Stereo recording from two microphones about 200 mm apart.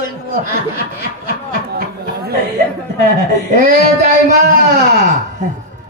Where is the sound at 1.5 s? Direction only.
50° right (ahead or behind).